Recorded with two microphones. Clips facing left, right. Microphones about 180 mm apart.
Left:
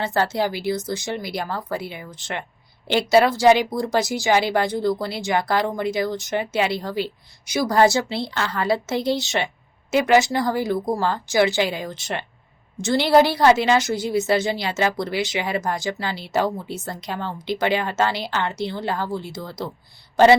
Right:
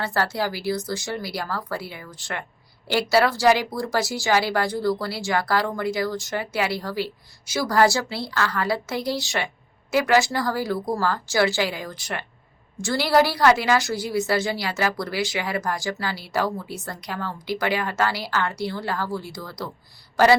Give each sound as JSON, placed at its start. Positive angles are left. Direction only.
{"t": 0.0, "sound": "a woman's voice", "side_deg": 20}